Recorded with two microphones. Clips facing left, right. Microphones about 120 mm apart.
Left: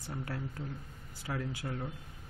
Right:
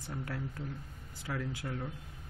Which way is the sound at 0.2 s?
Centre (ahead or behind).